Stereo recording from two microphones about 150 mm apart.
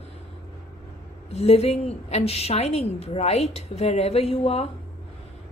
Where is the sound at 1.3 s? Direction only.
45° left (ahead or behind).